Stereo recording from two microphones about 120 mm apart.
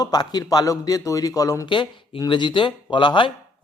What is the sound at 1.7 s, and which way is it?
A man's voice, 40° left (ahead or behind).